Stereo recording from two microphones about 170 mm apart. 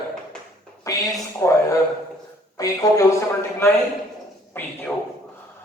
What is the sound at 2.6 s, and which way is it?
Speech, 20° left (ahead or behind).